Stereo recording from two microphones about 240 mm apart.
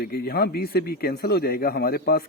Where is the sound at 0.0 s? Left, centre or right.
Left.